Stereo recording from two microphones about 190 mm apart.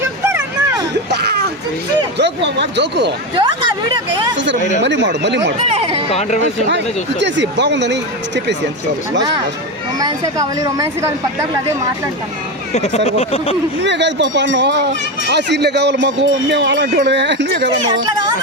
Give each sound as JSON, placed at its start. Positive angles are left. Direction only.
{"t": 0.3, "sound": "a sound", "side_deg": -15}
{"t": 1.1, "sound": "a sound", "side_deg": -60}
{"t": 2.1, "sound": "speech", "side_deg": -65}
{"t": 3.3, "sound": "a woman's voice", "side_deg": -25}
{"t": 4.8, "sound": "speech", "side_deg": -65}
{"t": 5.6, "sound": "chatter", "side_deg": -30}
{"t": 6.1, "sound": "speech", "side_deg": 35}
{"t": 6.7, "sound": "speech", "side_deg": -65}
{"t": 10.0, "sound": "a woman's voice", "side_deg": -20}
{"t": 12.7, "sound": "speech", "side_deg": 35}
{"t": 13.8, "sound": "speech", "side_deg": -65}